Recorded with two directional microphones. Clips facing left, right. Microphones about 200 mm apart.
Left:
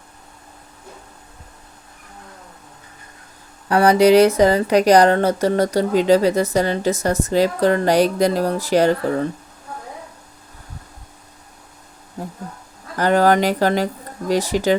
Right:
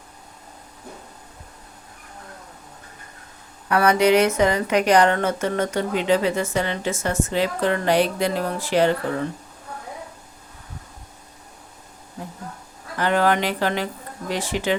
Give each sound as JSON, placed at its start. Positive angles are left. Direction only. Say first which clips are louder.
{"t": 3.7, "sound": "speech", "louder": "left 5 dB", "side_deg": 30}
{"t": 13.0, "sound": "speech", "louder": "left 5 dB", "side_deg": 40}